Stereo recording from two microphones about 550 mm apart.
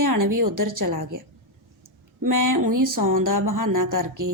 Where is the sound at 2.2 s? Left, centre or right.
Right.